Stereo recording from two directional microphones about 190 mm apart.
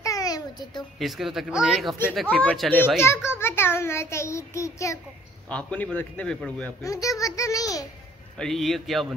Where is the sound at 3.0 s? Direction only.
15° left (ahead or behind).